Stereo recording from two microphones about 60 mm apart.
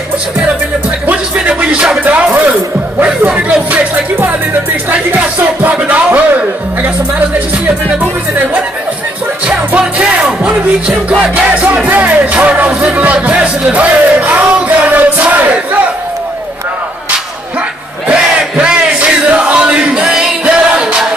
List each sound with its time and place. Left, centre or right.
1.1 s speech: centre
2.0 s music: right
5.4 s music: right
9.7 s music: centre
11.7 s music: right
18.0 s crowd: centre